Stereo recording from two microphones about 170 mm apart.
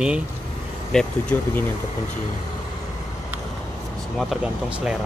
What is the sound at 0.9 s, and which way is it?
Speech, 5° left (ahead or behind).